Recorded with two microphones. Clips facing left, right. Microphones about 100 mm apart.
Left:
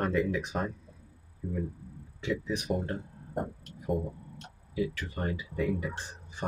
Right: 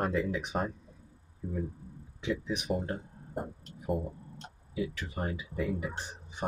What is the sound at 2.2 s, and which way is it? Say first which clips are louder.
Speech: left 1 dB; 15° right (ahead or behind).